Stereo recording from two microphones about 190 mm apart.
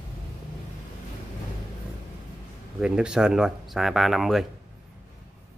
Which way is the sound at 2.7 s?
5° right (ahead or behind).